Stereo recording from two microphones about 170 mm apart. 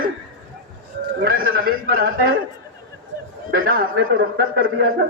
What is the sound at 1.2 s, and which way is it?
A man's voice, 60° right (ahead or behind).